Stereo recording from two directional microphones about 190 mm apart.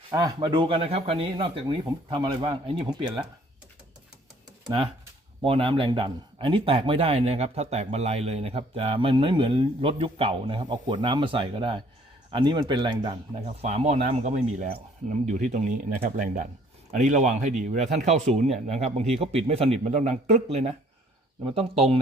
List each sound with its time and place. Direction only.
0.1 s speech: 20° right (ahead or behind)
5.4 s speech: 30° right (ahead or behind)